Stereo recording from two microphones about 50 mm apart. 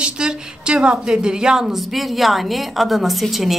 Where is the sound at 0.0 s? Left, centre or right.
Centre.